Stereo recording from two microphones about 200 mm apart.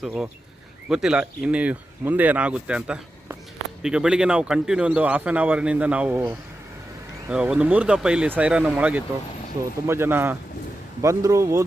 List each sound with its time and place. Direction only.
0.0 s a man's voice: 5° right (ahead or behind)